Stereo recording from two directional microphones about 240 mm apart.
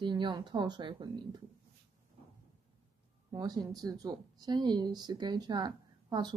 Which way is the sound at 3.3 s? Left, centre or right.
Centre.